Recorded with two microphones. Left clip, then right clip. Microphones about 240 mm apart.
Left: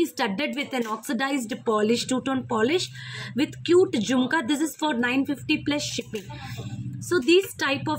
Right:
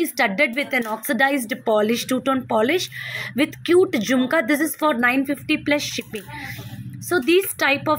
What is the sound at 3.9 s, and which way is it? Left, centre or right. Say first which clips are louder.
Speech: right 5 dB; centre.